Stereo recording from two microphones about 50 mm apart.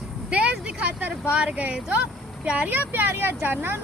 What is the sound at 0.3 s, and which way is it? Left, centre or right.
Vehicle, right.